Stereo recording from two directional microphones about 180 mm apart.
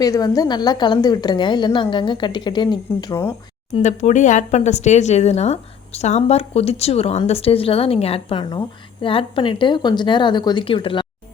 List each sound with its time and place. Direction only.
0.0 s speech: 20° left (ahead or behind)
3.8 s speech: 40° left (ahead or behind)